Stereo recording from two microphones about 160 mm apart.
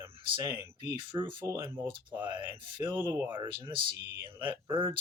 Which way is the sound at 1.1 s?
30° right (ahead or behind).